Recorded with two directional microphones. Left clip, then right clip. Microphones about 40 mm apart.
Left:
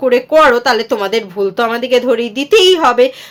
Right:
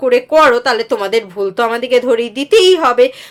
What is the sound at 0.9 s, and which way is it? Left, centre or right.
Speech, right.